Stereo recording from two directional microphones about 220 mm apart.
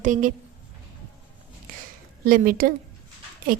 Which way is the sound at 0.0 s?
35° right (ahead or behind).